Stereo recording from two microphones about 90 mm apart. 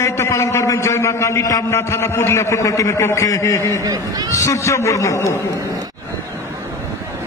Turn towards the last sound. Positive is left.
turn(degrees=30)  # may be behind; listen again after turning